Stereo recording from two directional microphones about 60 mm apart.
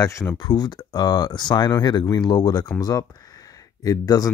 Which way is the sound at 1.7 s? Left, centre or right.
Left.